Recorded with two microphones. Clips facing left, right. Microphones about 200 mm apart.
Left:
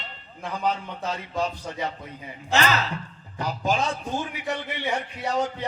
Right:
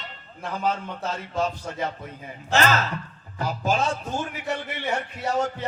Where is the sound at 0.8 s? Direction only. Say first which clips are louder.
Even; 15° left (ahead or behind).